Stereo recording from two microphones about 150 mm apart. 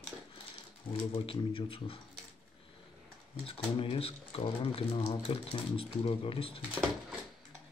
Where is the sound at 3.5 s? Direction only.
40° left (ahead or behind).